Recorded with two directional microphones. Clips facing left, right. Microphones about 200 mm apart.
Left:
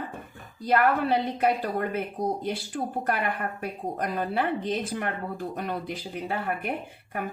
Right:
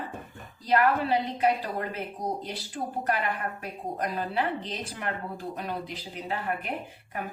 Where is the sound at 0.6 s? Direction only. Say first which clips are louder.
Left 1 dB; 55° left (ahead or behind).